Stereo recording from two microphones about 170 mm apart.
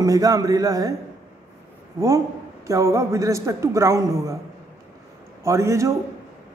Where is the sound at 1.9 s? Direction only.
20° right (ahead or behind).